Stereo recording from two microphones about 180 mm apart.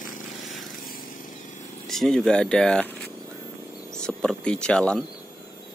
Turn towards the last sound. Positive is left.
turn(degrees=5)  # may be behind; listen again after turning